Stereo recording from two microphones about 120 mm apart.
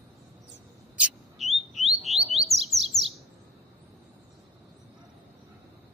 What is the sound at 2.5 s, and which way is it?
Bird, 60° right (ahead or behind).